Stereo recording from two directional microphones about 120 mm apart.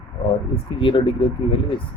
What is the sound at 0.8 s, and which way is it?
Speech, 45° left (ahead or behind).